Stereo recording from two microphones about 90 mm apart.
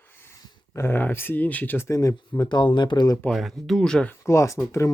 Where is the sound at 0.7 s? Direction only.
25° left (ahead or behind).